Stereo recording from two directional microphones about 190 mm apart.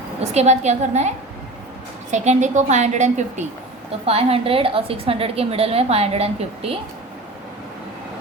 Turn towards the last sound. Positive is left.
turn(degrees=-30)  # may be behind; listen again after turning